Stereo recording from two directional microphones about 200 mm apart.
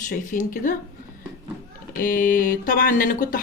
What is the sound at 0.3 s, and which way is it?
Speech, 40° left (ahead or behind).